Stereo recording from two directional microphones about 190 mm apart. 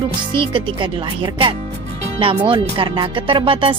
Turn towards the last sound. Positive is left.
turn(degrees=-25)  # may be behind; listen again after turning